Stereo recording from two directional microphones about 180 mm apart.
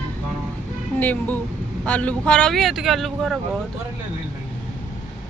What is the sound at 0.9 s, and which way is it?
Speech, 10° left (ahead or behind).